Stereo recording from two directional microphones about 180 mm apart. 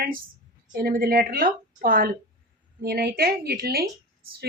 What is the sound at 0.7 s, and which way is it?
A woman's voice, 55° right (ahead or behind).